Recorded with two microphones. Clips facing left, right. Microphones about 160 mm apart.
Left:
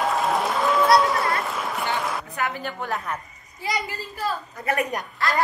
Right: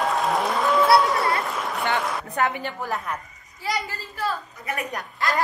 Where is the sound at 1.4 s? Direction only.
Centre (ahead or behind).